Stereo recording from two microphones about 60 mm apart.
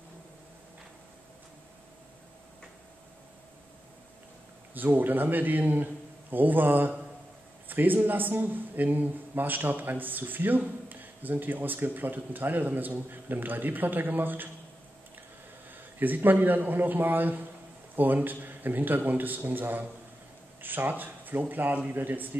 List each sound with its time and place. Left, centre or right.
4.7 s a man's voice: right
16.0 s a man's voice: right